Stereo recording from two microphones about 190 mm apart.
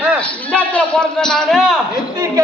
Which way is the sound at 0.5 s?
5° left (ahead or behind).